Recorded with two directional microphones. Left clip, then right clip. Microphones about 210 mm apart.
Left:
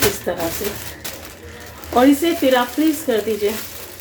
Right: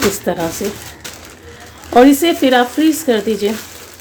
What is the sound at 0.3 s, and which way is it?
Speech, 50° right (ahead or behind).